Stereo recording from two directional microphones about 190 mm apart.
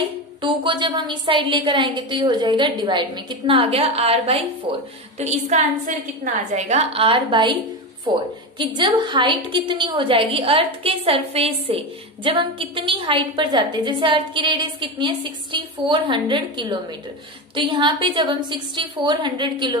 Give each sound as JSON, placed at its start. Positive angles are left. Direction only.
{"t": 0.4, "sound": "a woman's voice", "side_deg": -25}